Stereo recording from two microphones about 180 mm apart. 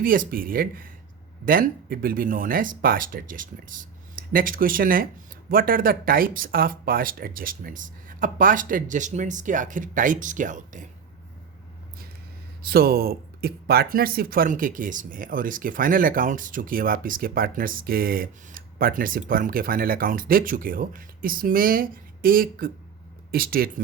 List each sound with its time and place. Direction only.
0.0 s speech: 50° right (ahead or behind)
12.6 s speech: 55° right (ahead or behind)